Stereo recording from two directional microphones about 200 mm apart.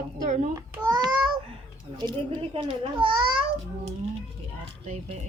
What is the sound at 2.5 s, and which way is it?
Speech, 25° right (ahead or behind).